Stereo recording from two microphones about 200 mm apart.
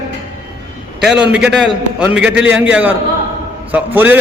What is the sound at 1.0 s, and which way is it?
A man's voice, 5° right (ahead or behind).